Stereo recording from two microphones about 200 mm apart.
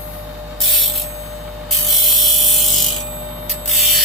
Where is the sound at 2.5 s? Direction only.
Centre (ahead or behind).